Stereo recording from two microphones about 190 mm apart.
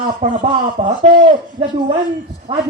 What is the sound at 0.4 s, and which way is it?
Speech, 30° right (ahead or behind).